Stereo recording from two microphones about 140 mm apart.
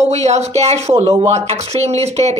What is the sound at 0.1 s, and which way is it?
Speech, 50° right (ahead or behind).